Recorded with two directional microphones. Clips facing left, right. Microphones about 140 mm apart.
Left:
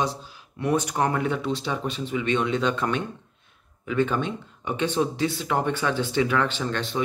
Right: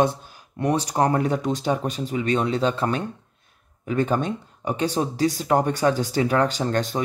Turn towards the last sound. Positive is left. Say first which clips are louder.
# right 3 dB
turn(degrees=-45)  # may be behind; listen again after turning